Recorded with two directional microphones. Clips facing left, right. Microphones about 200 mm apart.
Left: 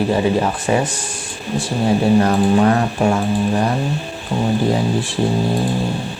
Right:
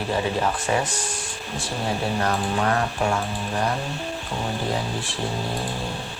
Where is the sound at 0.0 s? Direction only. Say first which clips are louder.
Left 7 dB; 10° left (ahead or behind).